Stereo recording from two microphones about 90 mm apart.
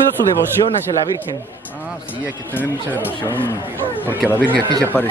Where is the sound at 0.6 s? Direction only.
70° left (ahead or behind).